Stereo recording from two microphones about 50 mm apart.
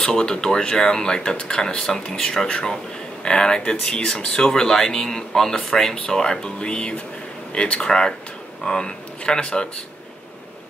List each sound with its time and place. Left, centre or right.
0.0 s speech: centre